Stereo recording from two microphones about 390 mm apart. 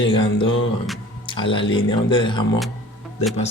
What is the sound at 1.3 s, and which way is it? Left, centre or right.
Speech, centre.